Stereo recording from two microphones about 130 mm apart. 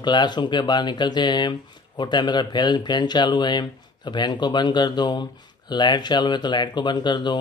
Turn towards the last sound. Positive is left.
turn(degrees=35)  # may be behind; listen again after turning